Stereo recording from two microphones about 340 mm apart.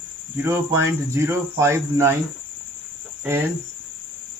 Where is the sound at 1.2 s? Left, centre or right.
Centre.